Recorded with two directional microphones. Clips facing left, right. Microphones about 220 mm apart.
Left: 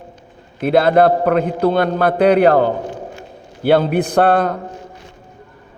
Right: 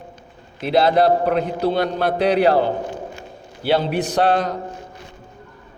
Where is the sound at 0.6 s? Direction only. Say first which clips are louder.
Left 4 dB; 55° left (ahead or behind).